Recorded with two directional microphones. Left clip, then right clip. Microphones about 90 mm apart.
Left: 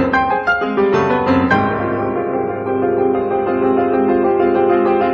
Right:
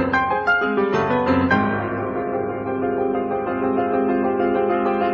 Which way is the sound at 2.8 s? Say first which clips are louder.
Left 6 dB; 30° left (ahead or behind).